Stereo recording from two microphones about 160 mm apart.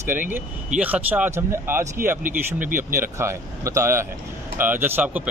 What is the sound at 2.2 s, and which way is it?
Speech, 55° right (ahead or behind).